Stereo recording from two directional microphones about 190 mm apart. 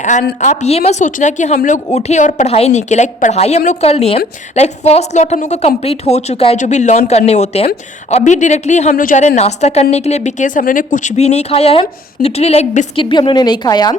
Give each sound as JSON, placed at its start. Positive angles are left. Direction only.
{"t": 0.0, "sound": "a woman's voice", "side_deg": 40}
{"t": 13.1, "sound": "a woman's voice", "side_deg": 25}